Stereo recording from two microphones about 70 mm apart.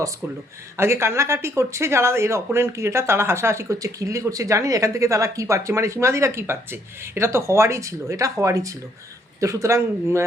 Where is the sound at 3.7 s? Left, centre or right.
Right.